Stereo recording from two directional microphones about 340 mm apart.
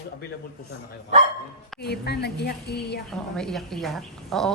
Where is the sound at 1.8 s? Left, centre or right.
Left.